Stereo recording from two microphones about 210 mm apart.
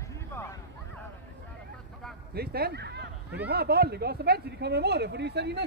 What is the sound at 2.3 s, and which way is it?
Speech, 45° right (ahead or behind).